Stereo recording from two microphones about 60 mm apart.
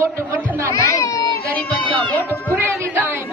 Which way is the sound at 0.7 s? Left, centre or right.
Left.